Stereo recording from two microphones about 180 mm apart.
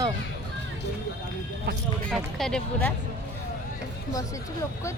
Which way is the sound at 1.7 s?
70° right (ahead or behind).